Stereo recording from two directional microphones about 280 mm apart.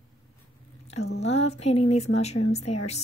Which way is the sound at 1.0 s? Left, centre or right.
Left.